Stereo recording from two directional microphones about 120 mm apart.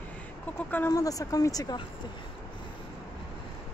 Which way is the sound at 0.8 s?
30° left (ahead or behind).